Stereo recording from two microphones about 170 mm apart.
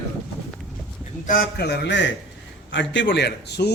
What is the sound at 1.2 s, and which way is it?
A man's voice, 55° left (ahead or behind).